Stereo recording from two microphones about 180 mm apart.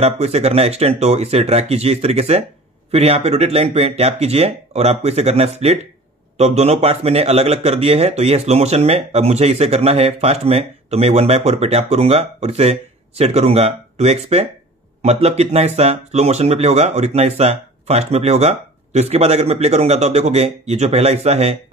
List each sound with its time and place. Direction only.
0.0 s speech: 35° right (ahead or behind)